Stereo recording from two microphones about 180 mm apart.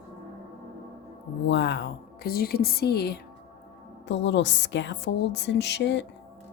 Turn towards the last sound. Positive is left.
turn(degrees=75)  # may be behind; listen again after turning